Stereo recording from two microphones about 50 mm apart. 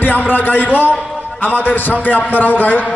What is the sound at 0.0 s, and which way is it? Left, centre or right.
A man's voice, left.